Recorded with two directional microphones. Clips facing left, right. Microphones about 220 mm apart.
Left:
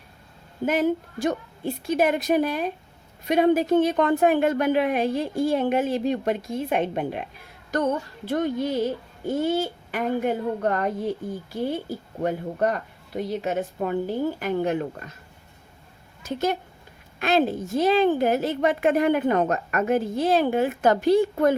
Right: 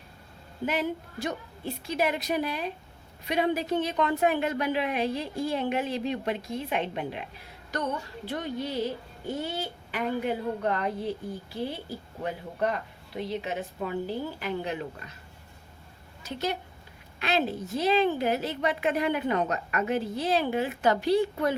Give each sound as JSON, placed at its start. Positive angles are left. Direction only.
{"t": 0.6, "sound": "a woman's voice", "side_deg": 45}
{"t": 12.2, "sound": "a woman's voice", "side_deg": 45}
{"t": 16.2, "sound": "a woman's voice", "side_deg": 50}